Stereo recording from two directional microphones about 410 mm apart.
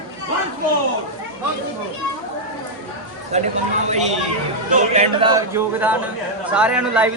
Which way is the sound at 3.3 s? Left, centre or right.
Centre.